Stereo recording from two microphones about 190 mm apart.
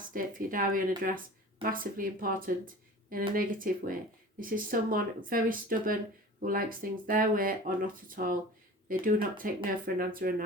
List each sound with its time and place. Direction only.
0.1 s speech: 45° right (ahead or behind)